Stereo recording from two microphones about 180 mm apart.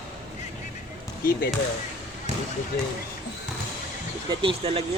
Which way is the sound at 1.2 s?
55° left (ahead or behind).